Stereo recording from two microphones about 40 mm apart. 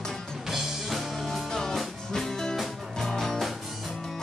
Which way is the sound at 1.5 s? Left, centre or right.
Centre.